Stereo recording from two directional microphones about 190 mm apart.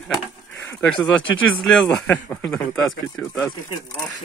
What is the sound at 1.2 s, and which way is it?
Speech, 90° left.